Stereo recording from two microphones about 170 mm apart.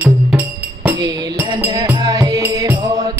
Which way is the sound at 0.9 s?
25° right (ahead or behind).